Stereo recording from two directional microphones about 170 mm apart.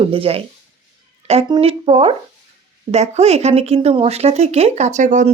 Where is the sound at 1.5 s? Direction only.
35° right (ahead or behind).